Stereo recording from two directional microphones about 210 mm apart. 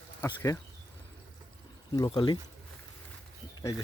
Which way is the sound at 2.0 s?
20° left (ahead or behind).